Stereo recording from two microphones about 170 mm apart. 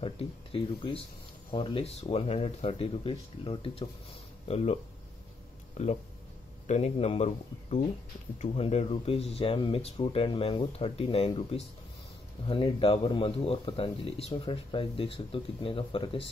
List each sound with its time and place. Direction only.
0.0 s speech: 30° left (ahead or behind)
5.8 s speech: 40° left (ahead or behind)
8.4 s speech: 40° left (ahead or behind)